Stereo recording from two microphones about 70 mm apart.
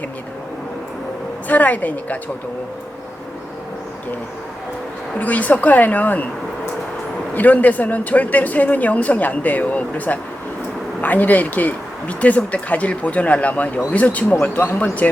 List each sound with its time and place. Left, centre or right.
1.5 s speech: left
5.2 s speech: left
7.3 s speech: left